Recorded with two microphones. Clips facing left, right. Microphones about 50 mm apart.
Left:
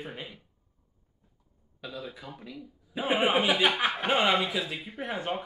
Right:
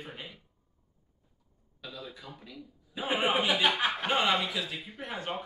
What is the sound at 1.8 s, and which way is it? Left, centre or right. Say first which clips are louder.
Speech: left 4 dB; centre.